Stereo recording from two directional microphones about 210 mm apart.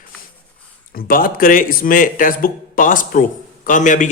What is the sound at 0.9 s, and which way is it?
A man's voice, 40° left (ahead or behind).